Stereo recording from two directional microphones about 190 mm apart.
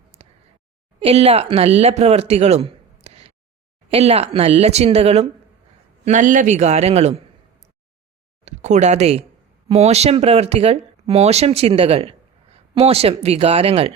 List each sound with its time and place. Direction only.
0.2 s a sound: 35° right (ahead or behind)
0.9 s speech: 30° right (ahead or behind)
8.4 s speech: 35° right (ahead or behind)